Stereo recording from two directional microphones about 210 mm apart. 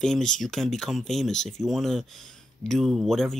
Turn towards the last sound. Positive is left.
turn(degrees=0)  # may be behind; listen again after turning